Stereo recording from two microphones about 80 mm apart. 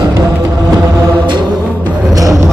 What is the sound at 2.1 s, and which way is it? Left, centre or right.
Music, right.